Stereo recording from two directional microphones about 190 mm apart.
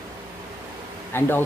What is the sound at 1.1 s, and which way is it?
Speech, 10° left (ahead or behind).